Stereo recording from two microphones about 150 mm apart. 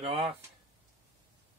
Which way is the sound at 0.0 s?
40° right (ahead or behind).